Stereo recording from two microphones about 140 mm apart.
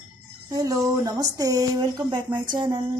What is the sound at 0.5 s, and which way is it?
Speech, 25° right (ahead or behind).